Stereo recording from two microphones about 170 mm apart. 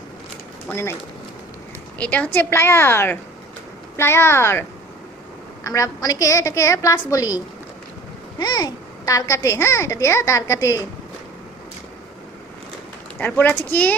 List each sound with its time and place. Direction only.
0.7 s a child's voice: 15° left (ahead or behind)
2.0 s a child's voice: 10° left (ahead or behind)
5.6 s a woman's voice: 20° left (ahead or behind)
13.1 s a child's voice: 10° left (ahead or behind)